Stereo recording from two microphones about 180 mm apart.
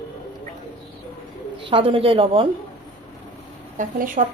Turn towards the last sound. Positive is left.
turn(degrees=-45)  # may be behind; listen again after turning